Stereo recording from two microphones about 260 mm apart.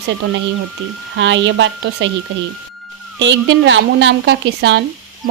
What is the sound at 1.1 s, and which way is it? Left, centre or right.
Speech, right.